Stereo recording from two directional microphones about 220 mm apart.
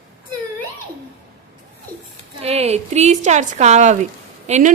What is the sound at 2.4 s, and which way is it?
Speech, 30° right (ahead or behind).